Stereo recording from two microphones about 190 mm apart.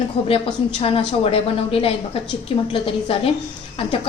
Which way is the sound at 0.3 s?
30° left (ahead or behind).